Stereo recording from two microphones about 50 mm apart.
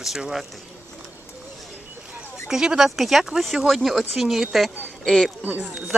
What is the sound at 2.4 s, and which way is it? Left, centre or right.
Speech, centre.